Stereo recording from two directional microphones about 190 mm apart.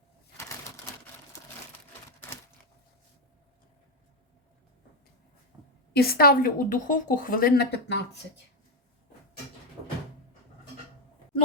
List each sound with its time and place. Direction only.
5.9 s a woman's voice: 55° left (ahead or behind)